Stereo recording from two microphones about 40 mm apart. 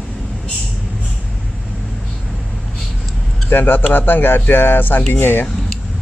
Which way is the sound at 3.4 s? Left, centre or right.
Left.